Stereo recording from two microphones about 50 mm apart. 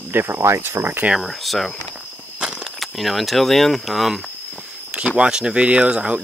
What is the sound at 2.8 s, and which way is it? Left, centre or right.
Speech, centre.